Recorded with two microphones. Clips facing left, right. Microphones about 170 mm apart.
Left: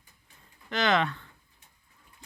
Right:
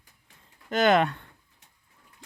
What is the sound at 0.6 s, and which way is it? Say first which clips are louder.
Speech: right 5 dB; 50° right (ahead or behind).